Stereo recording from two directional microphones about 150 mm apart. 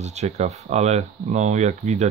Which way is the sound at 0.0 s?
50° right (ahead or behind).